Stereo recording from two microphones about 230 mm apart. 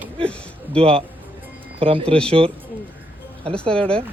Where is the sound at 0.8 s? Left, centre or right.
Right.